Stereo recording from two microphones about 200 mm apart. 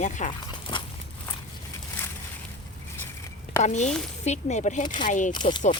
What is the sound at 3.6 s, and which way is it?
Speech, 35° left (ahead or behind).